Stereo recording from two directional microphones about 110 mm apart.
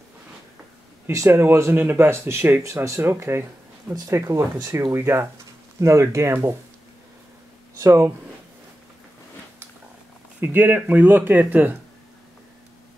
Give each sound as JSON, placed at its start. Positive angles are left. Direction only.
{"t": 1.0, "sound": "speech", "side_deg": -25}
{"t": 4.6, "sound": "speech", "side_deg": -35}
{"t": 4.9, "sound": "speech", "side_deg": -20}
{"t": 7.8, "sound": "speech", "side_deg": -25}
{"t": 10.4, "sound": "speech", "side_deg": -20}